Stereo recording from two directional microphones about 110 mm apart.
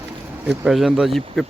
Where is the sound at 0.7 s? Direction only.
Centre (ahead or behind).